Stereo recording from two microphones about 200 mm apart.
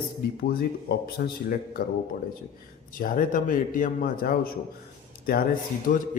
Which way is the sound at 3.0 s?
45° left (ahead or behind).